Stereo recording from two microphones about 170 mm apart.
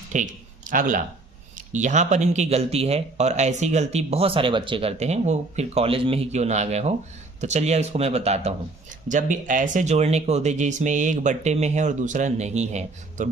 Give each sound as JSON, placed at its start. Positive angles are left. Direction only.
{"t": 0.1, "sound": "speech", "side_deg": -50}